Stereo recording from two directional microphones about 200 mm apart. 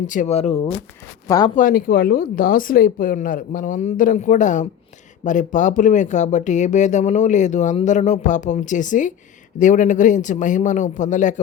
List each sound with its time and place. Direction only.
0.1 s speech: 35° left (ahead or behind)
1.3 s speech: 20° left (ahead or behind)
1.5 s speech: 45° left (ahead or behind)